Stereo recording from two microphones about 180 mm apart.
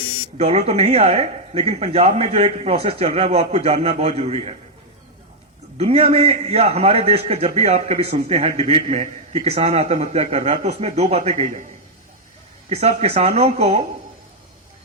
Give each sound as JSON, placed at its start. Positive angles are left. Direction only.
{"t": 0.0, "sound": "a sound", "side_deg": 30}
{"t": 0.3, "sound": "a man's voice", "side_deg": -35}
{"t": 5.7, "sound": "a man's voice", "side_deg": -35}
{"t": 12.6, "sound": "a man's voice", "side_deg": -35}